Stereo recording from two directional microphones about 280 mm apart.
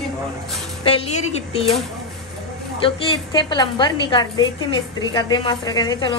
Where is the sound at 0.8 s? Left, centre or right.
Left.